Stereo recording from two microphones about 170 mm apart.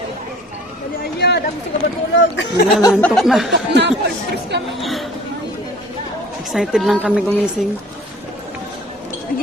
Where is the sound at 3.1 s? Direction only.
Centre (ahead or behind).